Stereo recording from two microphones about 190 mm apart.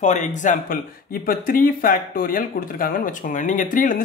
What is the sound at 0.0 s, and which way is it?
Speech, 40° left (ahead or behind).